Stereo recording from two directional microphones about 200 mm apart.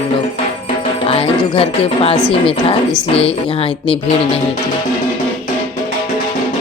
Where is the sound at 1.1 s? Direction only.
30° left (ahead or behind).